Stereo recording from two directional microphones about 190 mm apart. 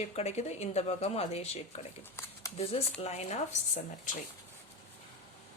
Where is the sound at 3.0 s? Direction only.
35° left (ahead or behind).